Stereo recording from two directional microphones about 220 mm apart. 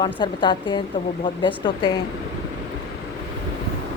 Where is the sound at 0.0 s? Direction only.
20° left (ahead or behind).